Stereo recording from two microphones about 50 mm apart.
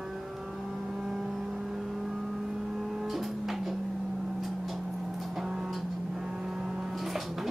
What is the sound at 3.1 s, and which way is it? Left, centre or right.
Music, centre.